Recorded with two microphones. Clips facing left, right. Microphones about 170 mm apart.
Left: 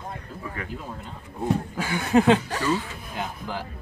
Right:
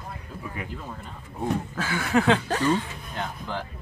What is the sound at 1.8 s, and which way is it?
Chuckle, 15° left (ahead or behind).